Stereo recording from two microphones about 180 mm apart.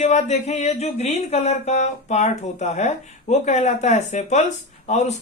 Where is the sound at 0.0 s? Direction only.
40° left (ahead or behind).